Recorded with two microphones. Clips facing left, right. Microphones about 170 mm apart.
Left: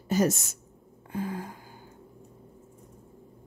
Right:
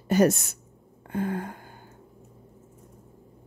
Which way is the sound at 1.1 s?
60° right (ahead or behind).